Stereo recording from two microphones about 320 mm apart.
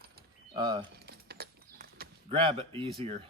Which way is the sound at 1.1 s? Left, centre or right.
Right.